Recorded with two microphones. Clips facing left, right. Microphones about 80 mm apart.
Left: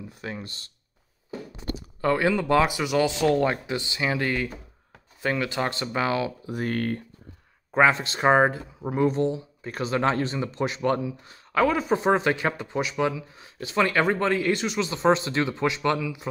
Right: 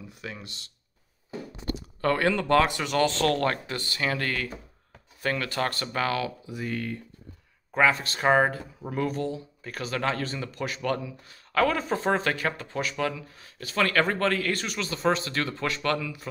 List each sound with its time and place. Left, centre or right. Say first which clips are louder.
0.2 s speech: left 4 dB; left
1.8 s speech: left 2 dB; centre
6.4 s speech: left 5 dB; left
7.7 s speech: left 3 dB; left